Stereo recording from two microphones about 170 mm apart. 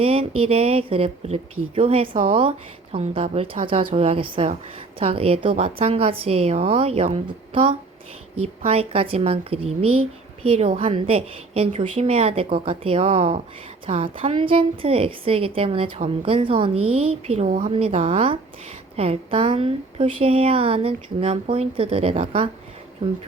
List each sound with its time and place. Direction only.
0.0 s speech: 35° right (ahead or behind)